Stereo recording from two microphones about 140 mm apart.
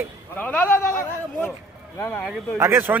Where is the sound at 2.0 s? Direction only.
10° left (ahead or behind).